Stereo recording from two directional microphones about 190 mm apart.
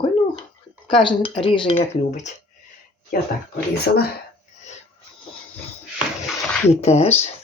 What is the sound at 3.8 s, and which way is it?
Speech, 55° left (ahead or behind).